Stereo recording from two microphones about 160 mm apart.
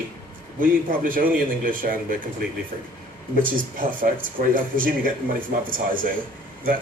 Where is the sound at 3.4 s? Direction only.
60° right (ahead or behind).